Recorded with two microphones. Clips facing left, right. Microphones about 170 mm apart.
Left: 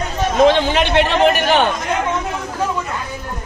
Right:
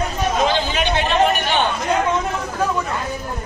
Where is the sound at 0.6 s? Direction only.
65° left (ahead or behind); by 1.6 s 80° left.